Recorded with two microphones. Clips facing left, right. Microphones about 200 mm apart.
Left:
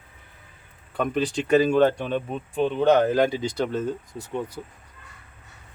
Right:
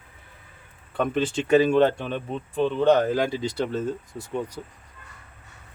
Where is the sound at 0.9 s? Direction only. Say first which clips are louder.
Even; 5° left (ahead or behind).